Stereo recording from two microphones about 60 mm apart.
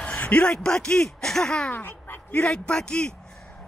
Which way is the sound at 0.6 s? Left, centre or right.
Centre.